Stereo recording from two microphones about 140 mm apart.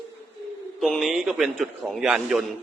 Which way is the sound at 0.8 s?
Centre (ahead or behind).